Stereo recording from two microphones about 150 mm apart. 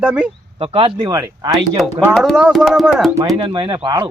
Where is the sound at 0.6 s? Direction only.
35° right (ahead or behind).